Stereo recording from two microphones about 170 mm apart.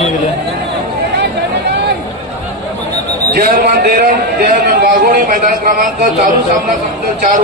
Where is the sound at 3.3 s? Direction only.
65° right (ahead or behind).